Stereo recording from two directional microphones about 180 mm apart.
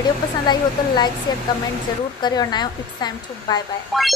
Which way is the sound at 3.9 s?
Centre (ahead or behind).